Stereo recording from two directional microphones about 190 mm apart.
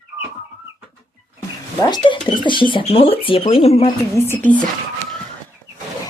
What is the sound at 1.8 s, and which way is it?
Speech, 25° left (ahead or behind).